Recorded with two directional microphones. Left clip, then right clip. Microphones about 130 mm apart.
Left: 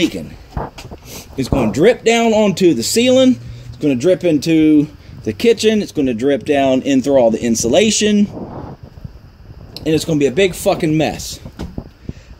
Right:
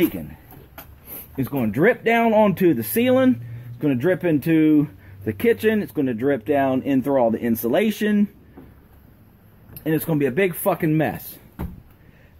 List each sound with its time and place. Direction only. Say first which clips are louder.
1.3 s speech: left 8 dB; 45° left (ahead or behind)
1.7 s speech: left 6 dB; 65° left (ahead or behind)
9.8 s speech: left 7 dB; 50° left (ahead or behind)